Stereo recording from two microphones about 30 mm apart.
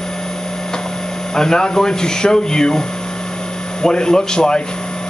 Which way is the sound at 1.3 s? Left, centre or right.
Left.